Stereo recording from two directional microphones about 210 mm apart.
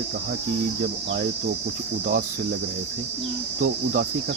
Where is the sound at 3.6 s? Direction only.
45° right (ahead or behind).